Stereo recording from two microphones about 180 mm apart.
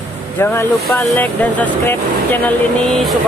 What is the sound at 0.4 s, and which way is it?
Speech, 15° left (ahead or behind).